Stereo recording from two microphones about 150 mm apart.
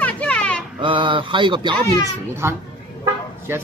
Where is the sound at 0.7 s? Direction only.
35° right (ahead or behind).